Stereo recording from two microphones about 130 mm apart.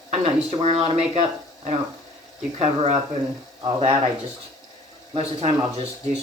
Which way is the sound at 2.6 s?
55° right (ahead or behind).